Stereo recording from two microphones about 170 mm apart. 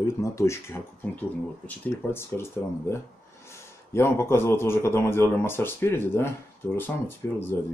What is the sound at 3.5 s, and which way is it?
A man's voice, 15° left (ahead or behind).